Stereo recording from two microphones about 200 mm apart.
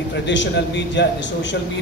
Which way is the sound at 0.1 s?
65° left (ahead or behind).